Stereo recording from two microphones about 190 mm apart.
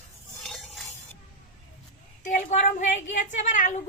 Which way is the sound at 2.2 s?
40° left (ahead or behind).